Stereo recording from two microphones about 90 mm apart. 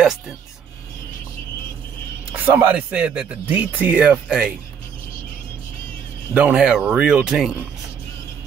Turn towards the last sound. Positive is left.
turn(degrees=-5)  # may be behind; listen again after turning